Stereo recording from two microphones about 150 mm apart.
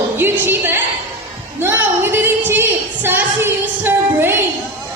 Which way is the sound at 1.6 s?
15° right (ahead or behind).